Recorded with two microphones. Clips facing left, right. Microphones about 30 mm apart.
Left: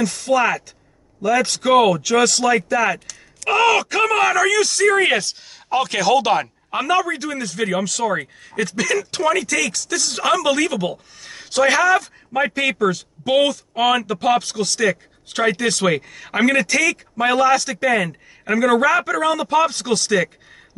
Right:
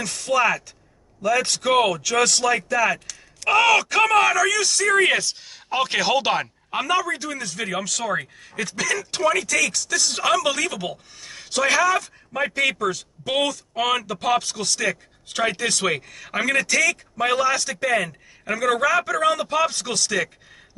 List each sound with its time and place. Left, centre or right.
0.0 s speech: centre
5.9 s speech: centre
6.3 s a man's voice: centre